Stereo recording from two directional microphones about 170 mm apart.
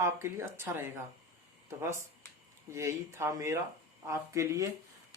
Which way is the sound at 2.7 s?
15° right (ahead or behind).